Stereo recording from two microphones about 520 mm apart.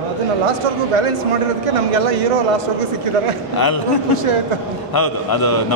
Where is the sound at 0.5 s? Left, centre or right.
Right.